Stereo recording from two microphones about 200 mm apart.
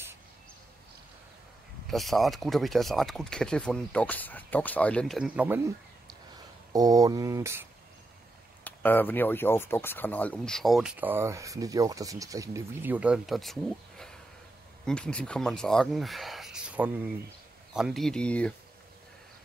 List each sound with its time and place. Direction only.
1.9 s speech: centre (ahead or behind)
6.7 s speech: 20° right (ahead or behind)
8.6 s speech: 10° left (ahead or behind)